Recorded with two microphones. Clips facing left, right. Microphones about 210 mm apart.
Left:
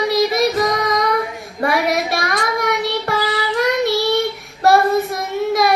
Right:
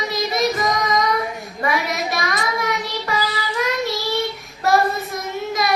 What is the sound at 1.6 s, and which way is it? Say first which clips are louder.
Child singing: left 5 dB; 65° left (ahead or behind).